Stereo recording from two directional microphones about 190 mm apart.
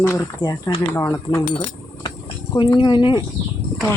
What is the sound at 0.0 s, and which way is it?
Speech, 15° left (ahead or behind).